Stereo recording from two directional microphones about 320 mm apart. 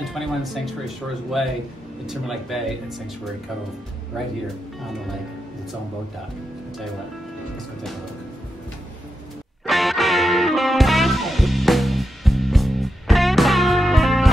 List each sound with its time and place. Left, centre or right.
0.1 s speech: centre
2.0 s speech: centre
9.7 s music: centre